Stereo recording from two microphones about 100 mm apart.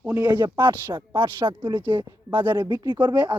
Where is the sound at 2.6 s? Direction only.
50° right (ahead or behind).